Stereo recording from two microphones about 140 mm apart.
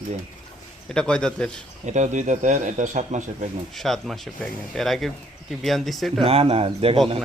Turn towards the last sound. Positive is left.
turn(degrees=-45)  # may be behind; listen again after turning